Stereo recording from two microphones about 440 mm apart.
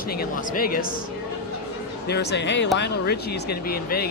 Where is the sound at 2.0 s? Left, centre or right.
Left.